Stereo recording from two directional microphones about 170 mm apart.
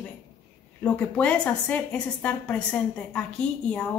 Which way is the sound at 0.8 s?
10° left (ahead or behind).